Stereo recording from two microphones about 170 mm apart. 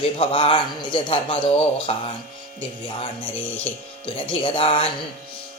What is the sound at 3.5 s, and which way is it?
Speech, 10° left (ahead or behind).